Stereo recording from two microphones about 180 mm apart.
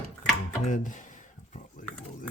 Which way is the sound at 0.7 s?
45° left (ahead or behind).